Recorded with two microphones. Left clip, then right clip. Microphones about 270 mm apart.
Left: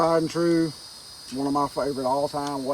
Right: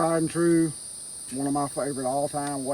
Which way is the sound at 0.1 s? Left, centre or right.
Centre.